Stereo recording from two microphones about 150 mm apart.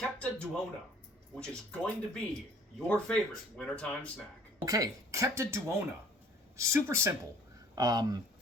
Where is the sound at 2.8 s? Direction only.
10° left (ahead or behind).